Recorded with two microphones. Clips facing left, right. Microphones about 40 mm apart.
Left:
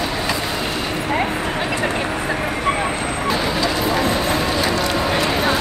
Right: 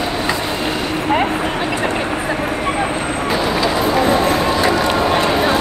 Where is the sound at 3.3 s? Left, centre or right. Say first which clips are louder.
Right 3 dB; centre.